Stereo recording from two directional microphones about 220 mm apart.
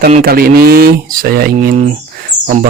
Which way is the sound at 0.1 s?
40° right (ahead or behind).